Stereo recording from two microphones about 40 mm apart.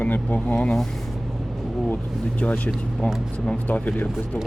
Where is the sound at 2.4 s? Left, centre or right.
Left.